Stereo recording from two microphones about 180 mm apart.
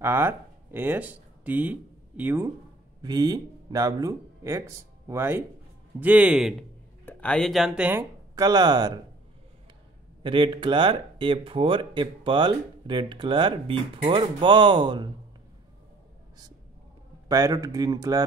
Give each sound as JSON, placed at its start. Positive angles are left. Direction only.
{"t": 0.0, "sound": "speech", "side_deg": -15}
{"t": 3.0, "sound": "speech", "side_deg": -20}
{"t": 7.1, "sound": "speech", "side_deg": 5}
{"t": 8.4, "sound": "speech", "side_deg": -20}
{"t": 10.2, "sound": "speech", "side_deg": -25}
{"t": 17.3, "sound": "speech", "side_deg": -20}